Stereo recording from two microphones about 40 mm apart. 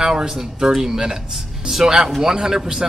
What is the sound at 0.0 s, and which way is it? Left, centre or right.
Speech, centre.